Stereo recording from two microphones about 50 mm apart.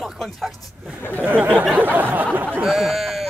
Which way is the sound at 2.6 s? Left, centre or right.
Centre.